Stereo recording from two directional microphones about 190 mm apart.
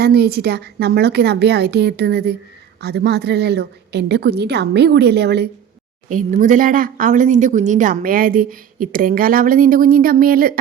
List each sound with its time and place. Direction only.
0.0 s a woman's voice: 55° right (ahead or behind)
6.1 s speech: 40° right (ahead or behind)